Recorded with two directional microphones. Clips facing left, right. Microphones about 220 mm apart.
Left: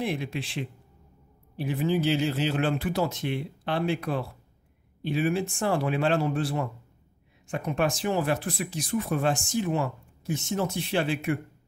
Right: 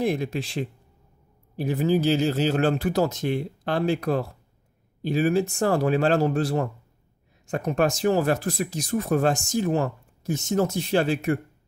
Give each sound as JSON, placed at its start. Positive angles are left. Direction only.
{"t": 0.0, "sound": "speech", "side_deg": -40}